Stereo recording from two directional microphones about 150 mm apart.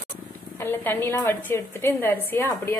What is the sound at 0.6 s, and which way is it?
A woman's voice, 15° left (ahead or behind).